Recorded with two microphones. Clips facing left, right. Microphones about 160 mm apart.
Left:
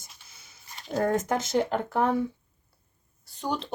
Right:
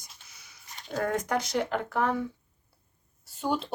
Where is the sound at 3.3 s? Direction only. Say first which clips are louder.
Right 2 dB; 5° right (ahead or behind).